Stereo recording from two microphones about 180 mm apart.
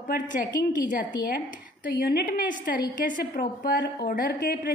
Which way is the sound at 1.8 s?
55° left (ahead or behind).